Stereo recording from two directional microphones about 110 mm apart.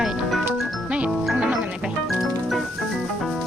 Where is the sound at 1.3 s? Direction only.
10° right (ahead or behind).